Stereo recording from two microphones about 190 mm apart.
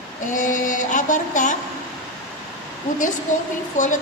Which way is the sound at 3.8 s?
40° left (ahead or behind).